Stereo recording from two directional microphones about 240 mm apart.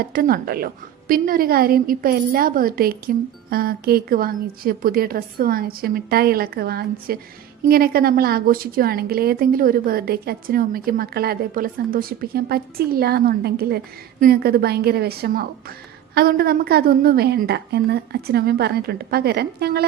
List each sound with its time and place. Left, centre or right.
0.0 s a woman's voice: right